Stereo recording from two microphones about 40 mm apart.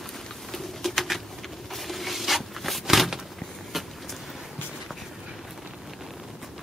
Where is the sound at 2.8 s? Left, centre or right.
Centre.